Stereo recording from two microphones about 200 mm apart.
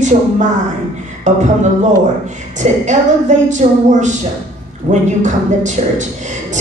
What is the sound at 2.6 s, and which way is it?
A woman's voice, 35° right (ahead or behind).